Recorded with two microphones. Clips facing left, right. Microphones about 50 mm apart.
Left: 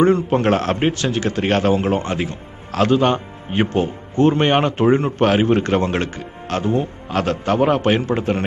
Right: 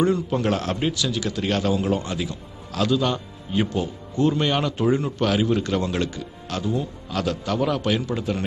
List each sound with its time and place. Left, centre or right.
0.0 s a man's voice: left